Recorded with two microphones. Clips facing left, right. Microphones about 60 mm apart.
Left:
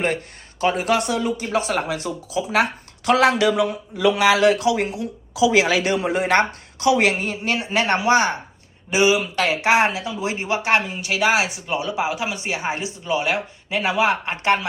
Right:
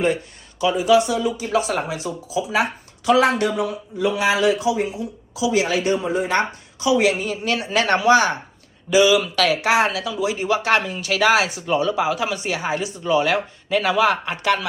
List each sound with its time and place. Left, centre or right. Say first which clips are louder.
0.6 s speech: right 3 dB; left
5.5 s speech: even; left
7.4 s speech: right 1 dB; left
13.1 s speech: right 4 dB; centre